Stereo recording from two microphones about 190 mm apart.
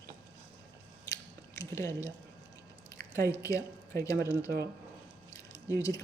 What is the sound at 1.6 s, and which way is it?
A woman's voice, 15° left (ahead or behind).